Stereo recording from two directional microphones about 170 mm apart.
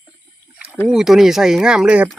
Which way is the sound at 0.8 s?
Centre (ahead or behind).